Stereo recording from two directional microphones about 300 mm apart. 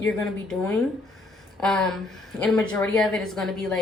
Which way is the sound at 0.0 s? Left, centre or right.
Centre.